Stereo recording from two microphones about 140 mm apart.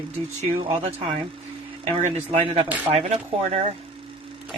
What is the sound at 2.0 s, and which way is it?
Speech, 55° right (ahead or behind).